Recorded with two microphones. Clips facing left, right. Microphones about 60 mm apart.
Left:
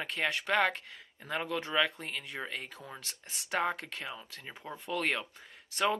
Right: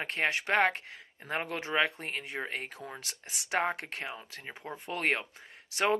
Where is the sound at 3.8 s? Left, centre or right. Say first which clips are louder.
Right 3 dB; right.